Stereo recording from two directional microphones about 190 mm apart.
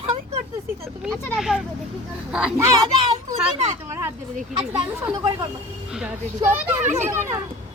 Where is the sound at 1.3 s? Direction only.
Centre (ahead or behind).